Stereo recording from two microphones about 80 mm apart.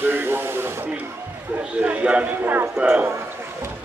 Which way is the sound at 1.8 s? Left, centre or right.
Centre.